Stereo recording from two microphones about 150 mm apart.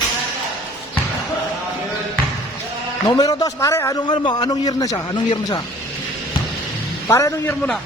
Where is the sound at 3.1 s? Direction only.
25° left (ahead or behind).